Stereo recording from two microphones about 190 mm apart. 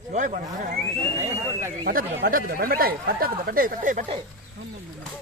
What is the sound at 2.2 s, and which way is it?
Speech, 50° right (ahead or behind).